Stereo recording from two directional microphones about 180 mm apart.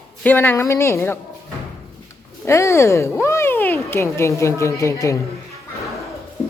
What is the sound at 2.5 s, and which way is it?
A woman's voice, 15° left (ahead or behind).